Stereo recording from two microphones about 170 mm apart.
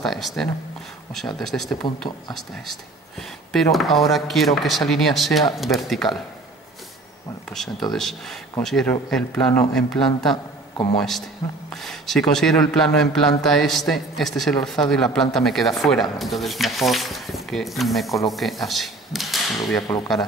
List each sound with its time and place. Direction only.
0.0 s speech: centre (ahead or behind)
1.8 s speech: 25° left (ahead or behind)
2.3 s speech: centre (ahead or behind)
7.9 s speech: centre (ahead or behind)
10.3 s a man's voice: 30° left (ahead or behind)
11.7 s speech: centre (ahead or behind)